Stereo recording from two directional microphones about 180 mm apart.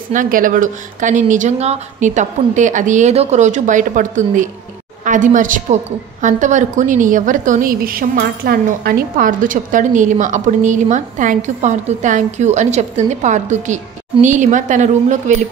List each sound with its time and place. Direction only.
0.1 s a woman's voice: 50° right (ahead or behind)